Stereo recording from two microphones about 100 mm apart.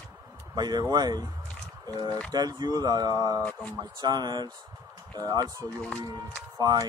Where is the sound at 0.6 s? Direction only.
45° right (ahead or behind).